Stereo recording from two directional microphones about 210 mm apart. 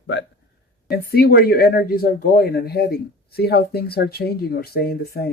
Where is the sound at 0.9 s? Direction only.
50° left (ahead or behind).